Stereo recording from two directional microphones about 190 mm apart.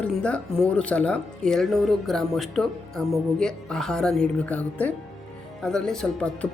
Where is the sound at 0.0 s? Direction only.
5° left (ahead or behind).